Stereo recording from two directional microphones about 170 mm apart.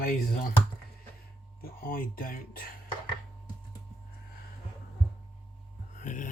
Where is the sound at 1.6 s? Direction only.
60° left (ahead or behind).